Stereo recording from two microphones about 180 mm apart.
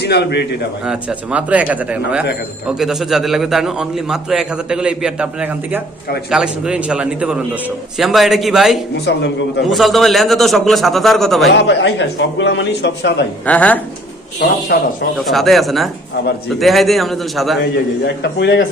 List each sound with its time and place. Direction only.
0.0 s a man's voice: 65° left (ahead or behind)
0.9 s a man's voice: 5° right (ahead or behind)
9.0 s a man's voice: 75° left (ahead or behind)
9.6 s a man's voice: centre (ahead or behind)
11.5 s a man's voice: 80° left
13.4 s speech: 5° left (ahead or behind)
14.7 s speech: 55° left (ahead or behind)
15.3 s a man's voice: centre (ahead or behind)
17.6 s a man's voice: 70° left (ahead or behind)